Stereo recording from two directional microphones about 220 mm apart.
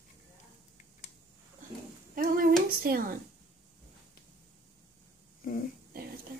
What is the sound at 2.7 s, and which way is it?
Speech, 40° right (ahead or behind).